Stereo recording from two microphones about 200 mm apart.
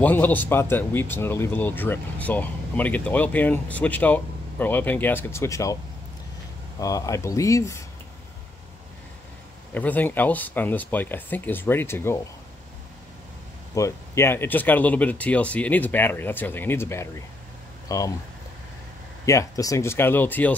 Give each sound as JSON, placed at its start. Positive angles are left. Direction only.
{"t": 0.0, "sound": "speech", "side_deg": 10}
{"t": 6.8, "sound": "speech", "side_deg": 15}
{"t": 9.8, "sound": "speech", "side_deg": 10}
{"t": 13.7, "sound": "speech", "side_deg": 15}
{"t": 19.2, "sound": "speech", "side_deg": 15}